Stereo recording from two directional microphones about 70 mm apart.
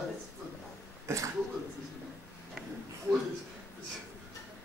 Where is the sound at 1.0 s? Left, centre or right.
Right.